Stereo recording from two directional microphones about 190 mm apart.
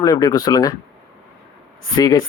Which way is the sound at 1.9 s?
20° left (ahead or behind).